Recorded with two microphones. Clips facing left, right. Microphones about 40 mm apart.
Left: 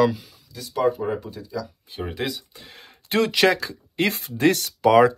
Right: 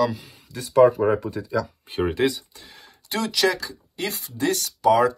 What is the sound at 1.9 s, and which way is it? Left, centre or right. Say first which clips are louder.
Speech: right 8 dB; right.